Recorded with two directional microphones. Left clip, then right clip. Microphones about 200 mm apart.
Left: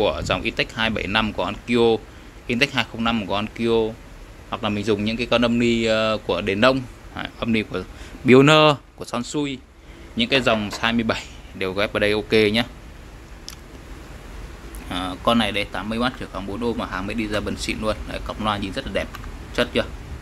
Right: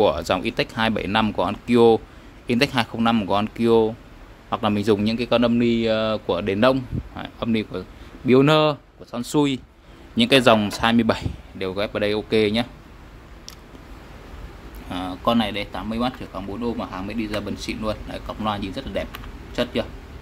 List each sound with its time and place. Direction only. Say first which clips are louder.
0.0 s a man's voice: right 2 dB; 20° right (ahead or behind)
9.2 s a man's voice: right 10 dB; 25° right (ahead or behind); by 12.6 s 5° right (ahead or behind)
14.9 s speech: left 2 dB; 5° right (ahead or behind)